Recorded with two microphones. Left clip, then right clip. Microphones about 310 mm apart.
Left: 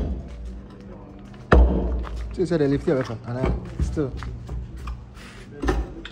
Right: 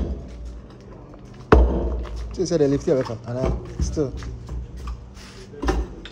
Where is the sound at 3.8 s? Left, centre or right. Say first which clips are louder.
Right 3 dB; centre.